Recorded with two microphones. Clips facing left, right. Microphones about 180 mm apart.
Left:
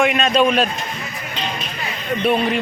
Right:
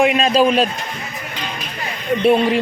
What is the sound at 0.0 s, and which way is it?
Speech, 30° right (ahead or behind).